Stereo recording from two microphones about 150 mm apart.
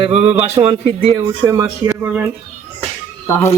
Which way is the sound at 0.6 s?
35° right (ahead or behind).